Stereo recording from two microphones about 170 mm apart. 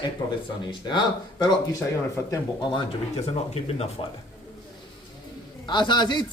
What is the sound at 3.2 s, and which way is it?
Speech, 40° left (ahead or behind).